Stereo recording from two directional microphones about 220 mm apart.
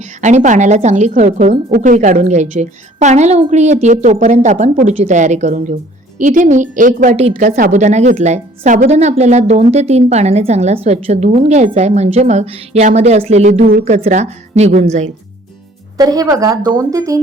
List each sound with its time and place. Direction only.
0.0 s speech: 30° right (ahead or behind)
16.0 s a woman's voice: 15° right (ahead or behind)